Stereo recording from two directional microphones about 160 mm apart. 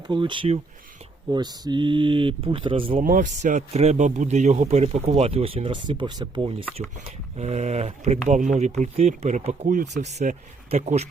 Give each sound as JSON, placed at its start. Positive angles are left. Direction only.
{"t": 0.1, "sound": "a man's voice", "side_deg": -30}
{"t": 3.0, "sound": "a man's voice", "side_deg": -55}
{"t": 7.3, "sound": "speech", "side_deg": -45}